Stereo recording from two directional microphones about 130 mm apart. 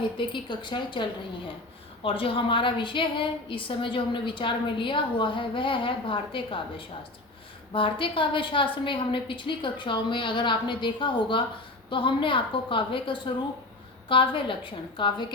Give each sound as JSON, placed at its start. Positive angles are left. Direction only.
{"t": 0.4, "sound": "a woman's voice", "side_deg": 35}
{"t": 2.0, "sound": "a woman's voice", "side_deg": 45}